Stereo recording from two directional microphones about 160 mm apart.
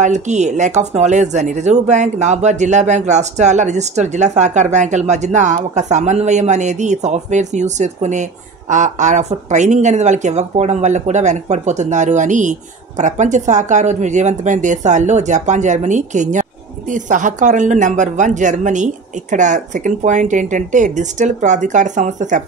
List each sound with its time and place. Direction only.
0.0 s speech: 45° right (ahead or behind)